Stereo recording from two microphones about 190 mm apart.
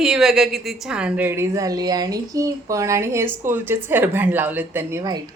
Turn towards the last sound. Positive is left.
turn(degrees=-15)  # may be behind; listen again after turning